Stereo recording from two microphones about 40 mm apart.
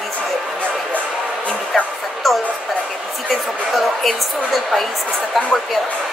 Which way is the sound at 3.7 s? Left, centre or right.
Centre.